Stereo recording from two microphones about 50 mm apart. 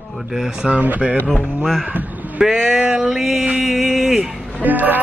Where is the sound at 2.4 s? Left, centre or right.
Centre.